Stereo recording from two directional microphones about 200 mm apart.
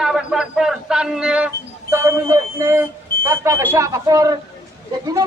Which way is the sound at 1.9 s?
15° right (ahead or behind).